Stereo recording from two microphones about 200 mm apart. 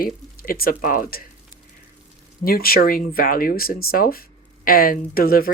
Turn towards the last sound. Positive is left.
turn(degrees=45)  # may be behind; listen again after turning